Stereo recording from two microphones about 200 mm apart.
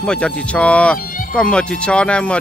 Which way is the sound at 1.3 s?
5° left (ahead or behind).